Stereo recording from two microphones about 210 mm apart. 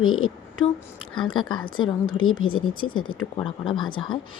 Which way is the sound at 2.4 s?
75° left (ahead or behind).